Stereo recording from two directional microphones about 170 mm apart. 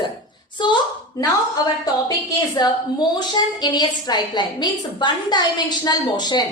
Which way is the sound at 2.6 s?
25° left (ahead or behind).